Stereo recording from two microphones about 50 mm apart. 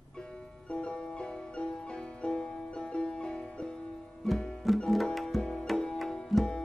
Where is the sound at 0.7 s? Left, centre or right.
Left.